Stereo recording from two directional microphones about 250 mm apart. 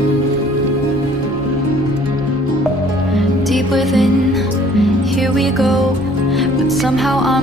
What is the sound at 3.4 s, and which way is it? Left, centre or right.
Music, centre.